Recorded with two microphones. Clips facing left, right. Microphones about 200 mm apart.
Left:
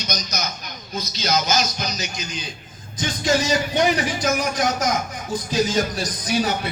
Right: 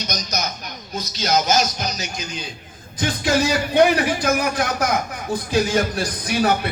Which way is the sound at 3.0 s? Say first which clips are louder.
Right 2 dB; 60° right (ahead or behind).